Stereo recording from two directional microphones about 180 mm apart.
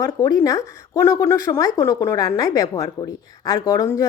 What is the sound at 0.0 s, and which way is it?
Speech, 20° left (ahead or behind).